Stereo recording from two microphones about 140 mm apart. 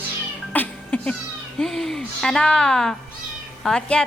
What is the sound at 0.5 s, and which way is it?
Cat, 10° left (ahead or behind).